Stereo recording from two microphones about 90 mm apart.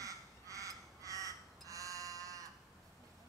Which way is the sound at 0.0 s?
40° right (ahead or behind).